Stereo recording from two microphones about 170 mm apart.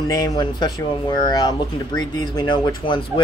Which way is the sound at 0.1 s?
20° left (ahead or behind).